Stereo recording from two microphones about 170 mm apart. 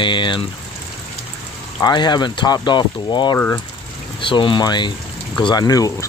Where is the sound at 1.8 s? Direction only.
25° left (ahead or behind).